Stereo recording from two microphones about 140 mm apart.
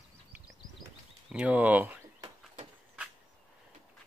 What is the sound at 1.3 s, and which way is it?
Speech, 10° right (ahead or behind).